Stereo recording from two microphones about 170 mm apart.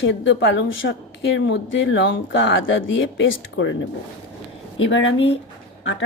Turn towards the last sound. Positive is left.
turn(degrees=90)